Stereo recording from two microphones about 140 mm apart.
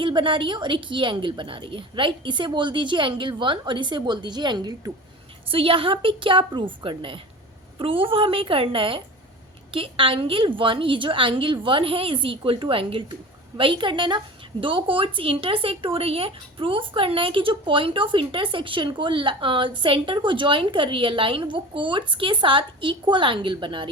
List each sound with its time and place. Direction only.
0.0 s speech: 35° right (ahead or behind)